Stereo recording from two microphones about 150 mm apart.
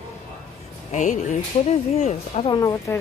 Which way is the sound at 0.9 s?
55° left (ahead or behind).